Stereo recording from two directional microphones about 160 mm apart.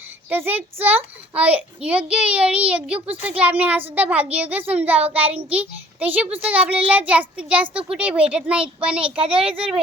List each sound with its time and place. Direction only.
0.3 s a child's voice: 10° right (ahead or behind)
9.1 s a child's voice: 35° right (ahead or behind)